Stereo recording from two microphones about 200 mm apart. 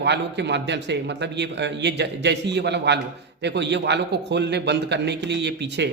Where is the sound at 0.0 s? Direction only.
60° right (ahead or behind).